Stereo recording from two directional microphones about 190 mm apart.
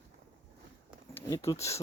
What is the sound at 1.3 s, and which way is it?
Speech, 15° left (ahead or behind).